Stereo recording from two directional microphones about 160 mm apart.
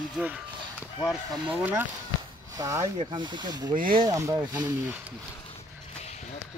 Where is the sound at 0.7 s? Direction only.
15° left (ahead or behind).